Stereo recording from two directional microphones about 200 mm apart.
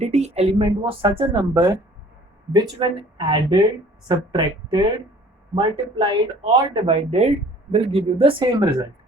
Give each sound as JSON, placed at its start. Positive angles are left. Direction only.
{"t": 0.0, "sound": "speech", "side_deg": -30}